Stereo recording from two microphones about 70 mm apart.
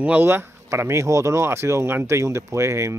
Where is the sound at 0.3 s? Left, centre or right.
Right.